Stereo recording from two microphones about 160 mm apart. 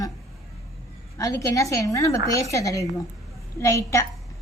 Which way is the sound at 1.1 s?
20° left (ahead or behind).